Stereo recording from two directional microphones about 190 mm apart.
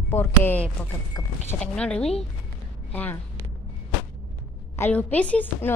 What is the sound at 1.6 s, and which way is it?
A woman's voice, 5° left (ahead or behind).